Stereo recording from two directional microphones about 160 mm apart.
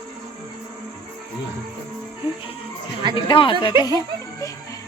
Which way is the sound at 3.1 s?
30° left (ahead or behind).